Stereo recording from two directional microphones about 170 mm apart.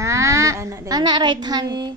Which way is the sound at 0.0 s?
15° right (ahead or behind).